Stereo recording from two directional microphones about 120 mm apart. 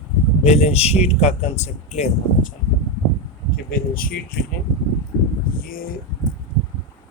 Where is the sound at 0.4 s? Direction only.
65° left (ahead or behind).